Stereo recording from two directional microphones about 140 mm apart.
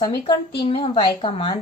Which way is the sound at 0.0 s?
35° left (ahead or behind).